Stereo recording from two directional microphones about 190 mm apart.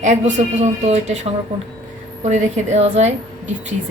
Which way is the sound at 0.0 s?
40° right (ahead or behind).